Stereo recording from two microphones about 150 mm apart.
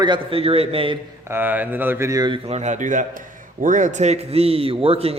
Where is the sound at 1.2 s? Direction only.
15° right (ahead or behind).